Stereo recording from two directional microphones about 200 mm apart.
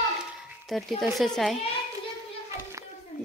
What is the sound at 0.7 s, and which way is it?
Speech, centre (ahead or behind).